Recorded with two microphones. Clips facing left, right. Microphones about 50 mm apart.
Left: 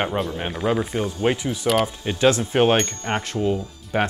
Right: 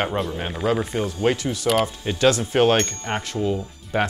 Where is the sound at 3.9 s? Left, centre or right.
Left.